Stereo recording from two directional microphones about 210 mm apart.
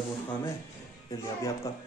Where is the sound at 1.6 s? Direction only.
15° left (ahead or behind).